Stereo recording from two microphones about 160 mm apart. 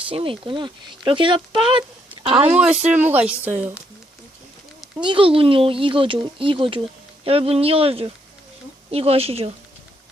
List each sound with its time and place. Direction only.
0.1 s speech: 35° right (ahead or behind)
2.5 s speech: 5° right (ahead or behind)
4.9 s speech: 30° right (ahead or behind)